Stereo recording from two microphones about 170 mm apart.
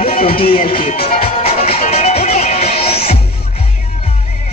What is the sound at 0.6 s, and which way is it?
Music, 55° left (ahead or behind).